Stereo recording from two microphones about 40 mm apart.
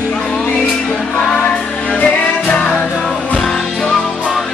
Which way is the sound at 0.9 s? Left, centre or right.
Centre.